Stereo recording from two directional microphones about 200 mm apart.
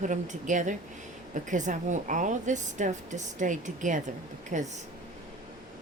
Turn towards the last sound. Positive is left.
turn(degrees=-35)  # may be behind; listen again after turning